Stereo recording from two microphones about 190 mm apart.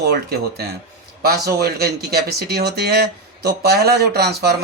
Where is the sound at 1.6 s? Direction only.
55° right (ahead or behind).